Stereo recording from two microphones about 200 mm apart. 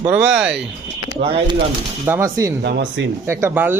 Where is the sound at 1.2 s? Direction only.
25° right (ahead or behind).